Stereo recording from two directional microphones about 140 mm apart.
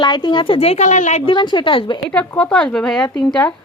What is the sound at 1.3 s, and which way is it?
Speech, 35° left (ahead or behind).